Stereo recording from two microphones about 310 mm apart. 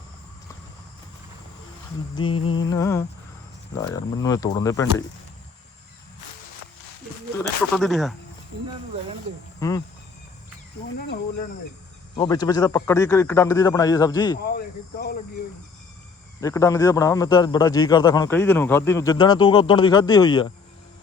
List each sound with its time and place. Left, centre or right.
2.1 s a man's voice: centre
7.3 s speech: centre
9.6 s a man's voice: centre
12.1 s a man's voice: centre
14.4 s cricket: left
16.4 s a man's voice: centre